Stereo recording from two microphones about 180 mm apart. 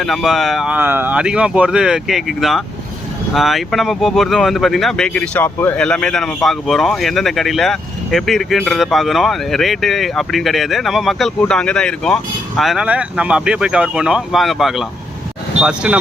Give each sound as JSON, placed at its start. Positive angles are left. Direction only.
{"t": 0.0, "sound": "speech", "side_deg": 0}